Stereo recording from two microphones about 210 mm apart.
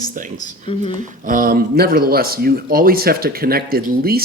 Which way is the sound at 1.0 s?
40° right (ahead or behind).